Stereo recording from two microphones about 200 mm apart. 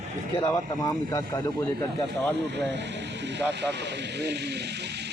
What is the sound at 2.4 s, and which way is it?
Speech, 60° right (ahead or behind).